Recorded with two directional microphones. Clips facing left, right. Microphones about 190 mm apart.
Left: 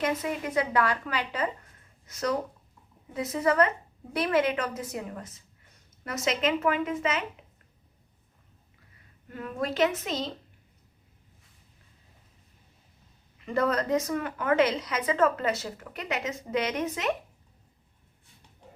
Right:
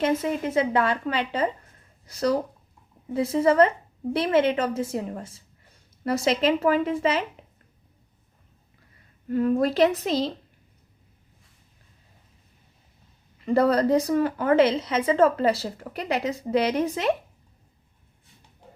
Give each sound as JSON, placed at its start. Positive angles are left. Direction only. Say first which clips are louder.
{"t": 0.0, "sound": "a woman's voice", "louder": "right 5 dB", "side_deg": -25}
{"t": 9.3, "sound": "a woman's voice", "louder": "right 10 dB", "side_deg": -35}
{"t": 13.4, "sound": "a woman's voice", "louder": "right 7 dB", "side_deg": -35}